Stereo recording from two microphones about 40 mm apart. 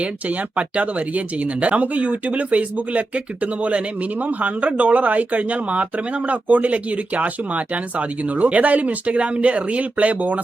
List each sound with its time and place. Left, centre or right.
0.5 s speech: right